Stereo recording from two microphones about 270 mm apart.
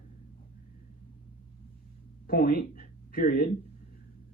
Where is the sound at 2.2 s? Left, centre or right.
Left.